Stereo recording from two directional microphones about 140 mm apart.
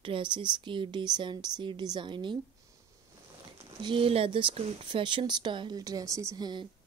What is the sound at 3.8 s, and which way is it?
A woman's voice, 40° right (ahead or behind).